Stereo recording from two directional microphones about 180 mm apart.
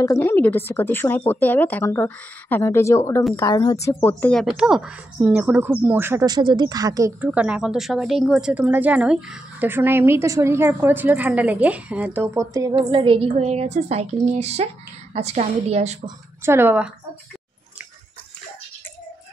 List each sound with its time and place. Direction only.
0.0 s a woman's voice: 15° left (ahead or behind); by 16.0 s 40° right (ahead or behind)
16.4 s a woman's voice: 10° right (ahead or behind)